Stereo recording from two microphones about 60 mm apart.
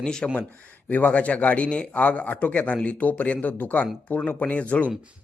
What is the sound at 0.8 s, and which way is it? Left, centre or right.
A man's voice, left.